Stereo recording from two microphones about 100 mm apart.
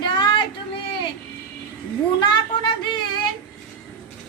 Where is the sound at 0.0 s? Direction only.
50° left (ahead or behind).